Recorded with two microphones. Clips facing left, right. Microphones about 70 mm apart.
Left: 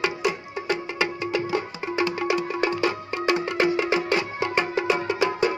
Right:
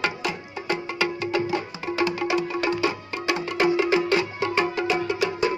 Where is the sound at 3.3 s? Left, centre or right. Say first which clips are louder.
Right 2 dB; left.